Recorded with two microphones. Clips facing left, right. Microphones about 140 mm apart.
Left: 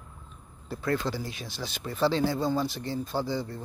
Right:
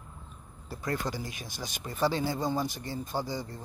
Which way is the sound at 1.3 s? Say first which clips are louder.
Left 3 dB; 50° right (ahead or behind).